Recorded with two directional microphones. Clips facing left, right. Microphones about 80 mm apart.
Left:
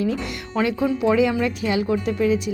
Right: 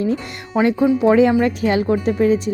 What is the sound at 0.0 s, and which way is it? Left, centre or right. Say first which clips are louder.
Speech: right 3 dB; right.